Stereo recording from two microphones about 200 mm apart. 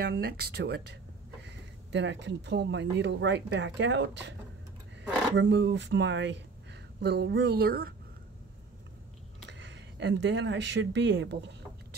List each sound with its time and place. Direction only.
0.0 s speech: 55° right (ahead or behind)
9.5 s speech: 60° right (ahead or behind)